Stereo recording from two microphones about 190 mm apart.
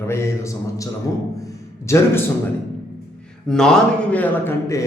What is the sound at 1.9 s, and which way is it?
Speech, 15° left (ahead or behind).